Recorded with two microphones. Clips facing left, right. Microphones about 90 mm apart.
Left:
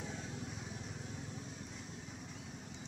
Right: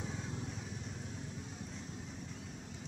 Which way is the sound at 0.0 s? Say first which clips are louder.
Right 2 dB; 5° left (ahead or behind).